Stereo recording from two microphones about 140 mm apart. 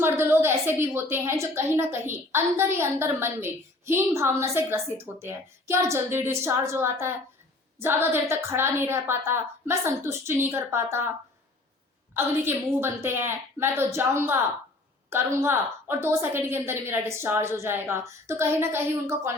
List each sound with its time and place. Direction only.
0.0 s a woman's voice: 15° right (ahead or behind)
12.1 s a woman's voice: 15° right (ahead or behind)